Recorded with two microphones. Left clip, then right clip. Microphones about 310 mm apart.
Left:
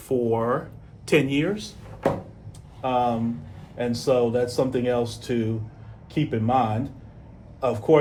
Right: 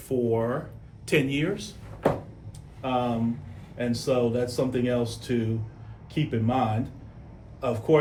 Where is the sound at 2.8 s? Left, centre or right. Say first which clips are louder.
Left 4 dB; centre.